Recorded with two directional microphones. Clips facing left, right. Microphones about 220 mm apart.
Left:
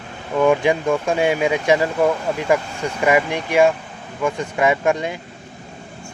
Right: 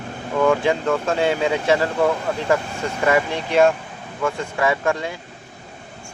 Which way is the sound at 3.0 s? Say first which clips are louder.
Left 2 dB; 15° left (ahead or behind).